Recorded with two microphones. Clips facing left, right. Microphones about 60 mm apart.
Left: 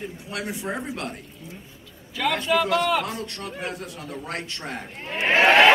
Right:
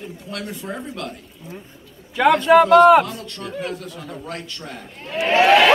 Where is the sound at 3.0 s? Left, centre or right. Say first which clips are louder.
Left 1 dB; left.